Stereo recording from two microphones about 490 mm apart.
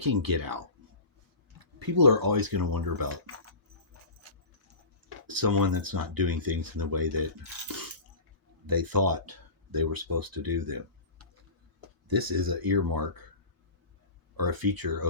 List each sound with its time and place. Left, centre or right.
0.0 s speech: right
4.2 s keys jangling: right
5.2 s speech: right
8.6 s speech: right
12.0 s speech: right
14.3 s speech: right